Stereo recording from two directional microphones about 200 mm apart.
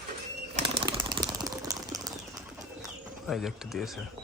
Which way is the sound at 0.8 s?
20° right (ahead or behind).